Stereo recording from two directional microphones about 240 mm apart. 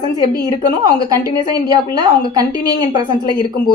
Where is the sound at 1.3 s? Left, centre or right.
Centre.